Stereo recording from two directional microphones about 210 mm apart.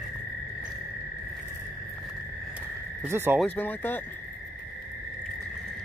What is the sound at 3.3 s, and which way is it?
Speech, 5° left (ahead or behind).